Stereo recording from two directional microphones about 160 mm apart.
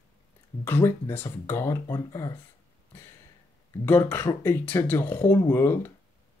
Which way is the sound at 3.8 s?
10° left (ahead or behind).